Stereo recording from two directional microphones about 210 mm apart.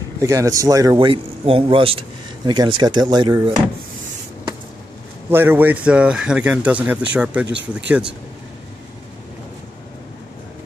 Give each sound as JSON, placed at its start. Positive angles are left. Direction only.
{"t": 0.2, "sound": "a man's voice", "side_deg": -15}
{"t": 5.3, "sound": "a man's voice", "side_deg": -10}